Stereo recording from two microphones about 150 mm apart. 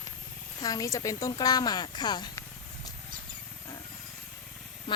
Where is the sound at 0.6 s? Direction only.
25° left (ahead or behind).